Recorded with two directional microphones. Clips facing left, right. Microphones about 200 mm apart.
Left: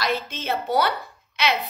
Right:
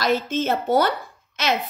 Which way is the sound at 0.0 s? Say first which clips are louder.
Right 5 dB; 45° right (ahead or behind).